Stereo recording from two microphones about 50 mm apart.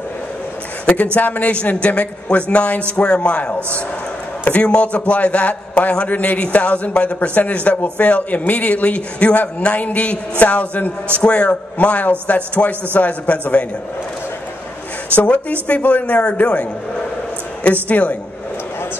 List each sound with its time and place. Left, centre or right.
1.1 s a man's voice: left
15.1 s a man's voice: left
17.8 s a man's voice: left